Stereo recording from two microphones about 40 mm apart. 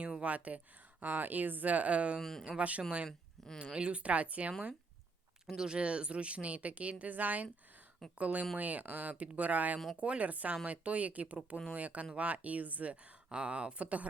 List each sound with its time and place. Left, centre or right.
0.0 s a sound: right
1.0 s speech: right
3.1 s speech: centre
3.8 s speech: right
5.5 s speech: right